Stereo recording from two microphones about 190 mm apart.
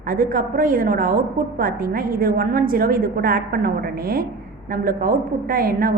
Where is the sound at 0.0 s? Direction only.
50° right (ahead or behind).